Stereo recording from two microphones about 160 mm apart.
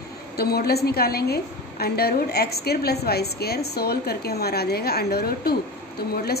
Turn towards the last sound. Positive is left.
turn(degrees=75)  # may be behind; listen again after turning